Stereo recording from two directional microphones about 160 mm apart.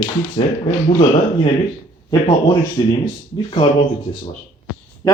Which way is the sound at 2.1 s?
25° left (ahead or behind).